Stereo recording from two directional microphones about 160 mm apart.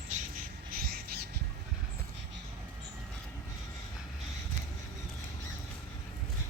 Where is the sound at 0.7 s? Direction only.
70° right (ahead or behind).